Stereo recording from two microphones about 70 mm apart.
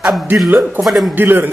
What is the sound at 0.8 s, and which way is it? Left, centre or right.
Speech, centre.